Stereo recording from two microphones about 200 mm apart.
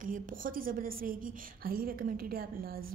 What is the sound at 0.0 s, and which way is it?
A woman's voice, 40° right (ahead or behind).